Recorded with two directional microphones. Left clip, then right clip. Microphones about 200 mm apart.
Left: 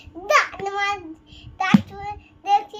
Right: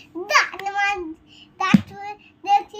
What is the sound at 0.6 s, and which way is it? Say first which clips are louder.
Child singing: right 2 dB; 15° left (ahead or behind).